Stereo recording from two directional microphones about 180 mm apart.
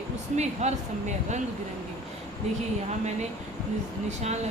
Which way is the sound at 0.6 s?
40° right (ahead or behind).